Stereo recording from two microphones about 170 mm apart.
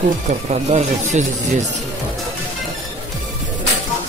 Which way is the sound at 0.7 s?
45° right (ahead or behind).